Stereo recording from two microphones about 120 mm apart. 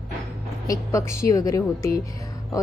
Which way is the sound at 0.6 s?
30° left (ahead or behind).